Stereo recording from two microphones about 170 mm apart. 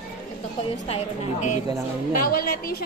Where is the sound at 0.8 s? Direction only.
40° left (ahead or behind).